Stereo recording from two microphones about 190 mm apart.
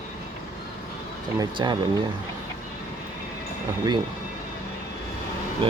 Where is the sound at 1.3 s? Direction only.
25° right (ahead or behind).